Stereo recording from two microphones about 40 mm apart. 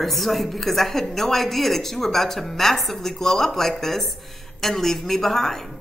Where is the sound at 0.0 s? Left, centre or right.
Centre.